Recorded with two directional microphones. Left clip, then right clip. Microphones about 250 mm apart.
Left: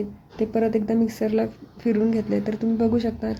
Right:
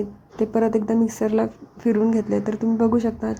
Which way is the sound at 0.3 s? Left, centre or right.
Centre.